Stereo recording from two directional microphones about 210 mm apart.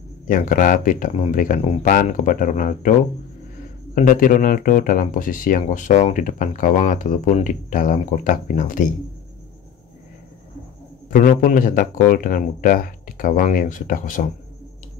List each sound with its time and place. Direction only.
0.3 s speech: 40° left (ahead or behind)
3.9 s speech: 40° left (ahead or behind)
11.1 s speech: 40° left (ahead or behind)